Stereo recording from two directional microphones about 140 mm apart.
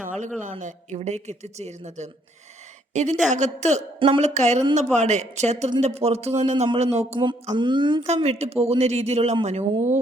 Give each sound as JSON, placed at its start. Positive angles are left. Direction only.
{"t": 0.0, "sound": "a woman's voice", "side_deg": -65}
{"t": 7.5, "sound": "a sound", "side_deg": -35}
{"t": 8.0, "sound": "speech", "side_deg": -50}